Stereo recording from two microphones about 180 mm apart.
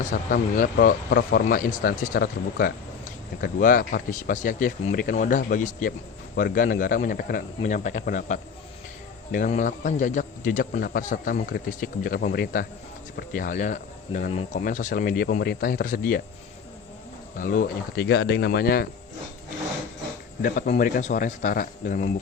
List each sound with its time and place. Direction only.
0.1 s a man's voice: 50° left (ahead or behind)
17.3 s speech: 50° left (ahead or behind)
20.4 s a man's voice: 50° left (ahead or behind)